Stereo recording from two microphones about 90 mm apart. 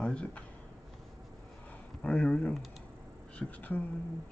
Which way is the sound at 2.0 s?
15° left (ahead or behind).